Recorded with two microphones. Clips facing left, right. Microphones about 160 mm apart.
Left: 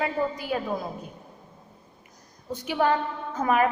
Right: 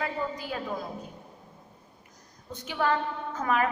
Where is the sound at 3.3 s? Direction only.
20° left (ahead or behind).